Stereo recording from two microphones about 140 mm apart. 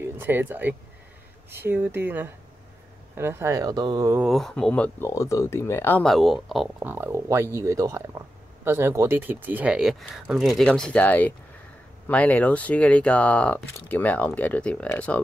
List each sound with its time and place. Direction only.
0.0 s speech: 15° right (ahead or behind)
4.2 s speech: centre (ahead or behind)
5.1 s speech: 20° left (ahead or behind)
6.0 s speech: centre (ahead or behind)
6.8 s speech: 15° right (ahead or behind); by 15.2 s 10° left (ahead or behind)